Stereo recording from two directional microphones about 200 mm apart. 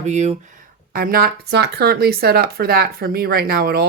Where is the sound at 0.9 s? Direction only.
45° right (ahead or behind).